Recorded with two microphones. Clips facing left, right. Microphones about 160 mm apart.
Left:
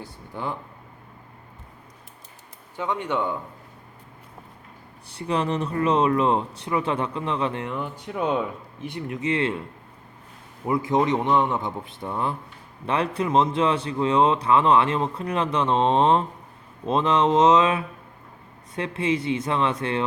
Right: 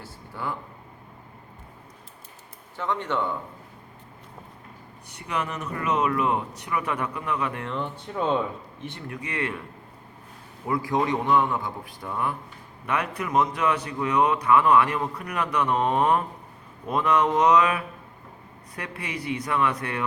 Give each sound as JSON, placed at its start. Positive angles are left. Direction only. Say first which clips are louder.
{"t": 0.4, "sound": "a man's voice", "louder": "left 2 dB", "side_deg": 20}
{"t": 2.7, "sound": "speech", "louder": "left 1 dB", "side_deg": 15}
{"t": 5.0, "sound": "a man's voice", "louder": "left 6 dB", "side_deg": 30}
{"t": 7.7, "sound": "a man's voice", "louder": "left 1 dB", "side_deg": 15}
{"t": 10.7, "sound": "a man's voice", "louder": "left 3 dB", "side_deg": 20}